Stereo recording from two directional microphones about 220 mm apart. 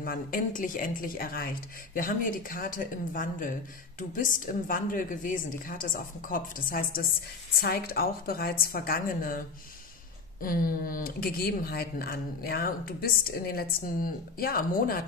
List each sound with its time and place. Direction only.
0.0 s speech: 40° left (ahead or behind)
10.4 s speech: 40° left (ahead or behind)